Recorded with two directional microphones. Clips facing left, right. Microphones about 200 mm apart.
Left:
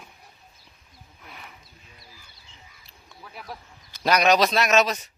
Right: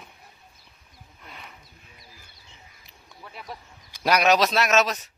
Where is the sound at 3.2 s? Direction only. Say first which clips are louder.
Even; centre (ahead or behind).